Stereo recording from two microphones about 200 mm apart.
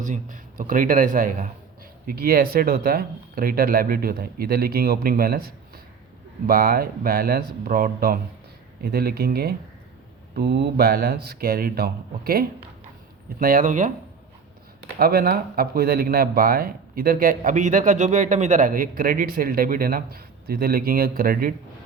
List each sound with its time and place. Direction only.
0.0 s speech: 40° right (ahead or behind)
6.5 s speech: 45° right (ahead or behind)
14.9 s speech: 50° right (ahead or behind)